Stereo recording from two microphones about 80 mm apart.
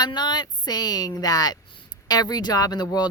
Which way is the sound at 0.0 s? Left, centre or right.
Left.